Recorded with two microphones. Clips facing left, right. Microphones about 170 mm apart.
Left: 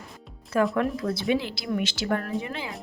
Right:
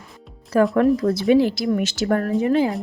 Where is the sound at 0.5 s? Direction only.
40° right (ahead or behind).